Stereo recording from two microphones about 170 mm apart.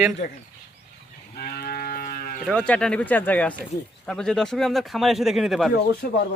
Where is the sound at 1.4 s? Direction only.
60° left (ahead or behind).